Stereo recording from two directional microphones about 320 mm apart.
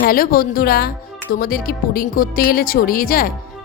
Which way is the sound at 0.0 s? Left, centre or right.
Left.